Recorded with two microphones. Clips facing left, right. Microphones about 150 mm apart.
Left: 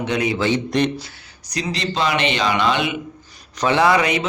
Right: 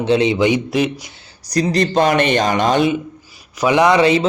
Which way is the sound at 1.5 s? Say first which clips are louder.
Right 8 dB; 40° right (ahead or behind).